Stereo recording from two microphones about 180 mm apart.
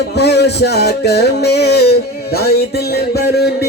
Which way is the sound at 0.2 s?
65° left (ahead or behind).